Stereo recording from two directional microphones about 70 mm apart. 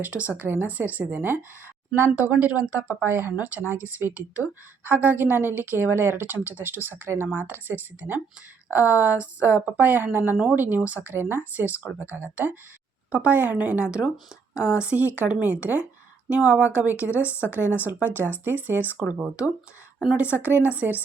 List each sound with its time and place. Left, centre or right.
0.0 s speech: right
3.1 s a woman's voice: right
20.1 s speech: right